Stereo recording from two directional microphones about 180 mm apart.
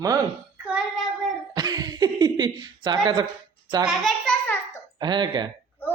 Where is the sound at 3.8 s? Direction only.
Centre (ahead or behind).